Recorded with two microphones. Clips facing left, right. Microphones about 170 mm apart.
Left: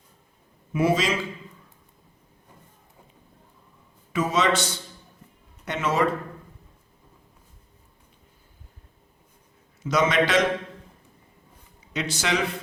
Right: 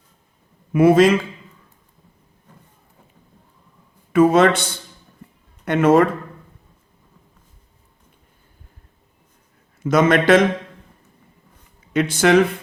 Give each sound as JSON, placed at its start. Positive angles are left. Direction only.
{"t": 0.7, "sound": "a man's voice", "side_deg": -55}
{"t": 4.1, "sound": "a man's voice", "side_deg": -55}
{"t": 9.8, "sound": "a man's voice", "side_deg": -55}
{"t": 11.9, "sound": "a man's voice", "side_deg": -55}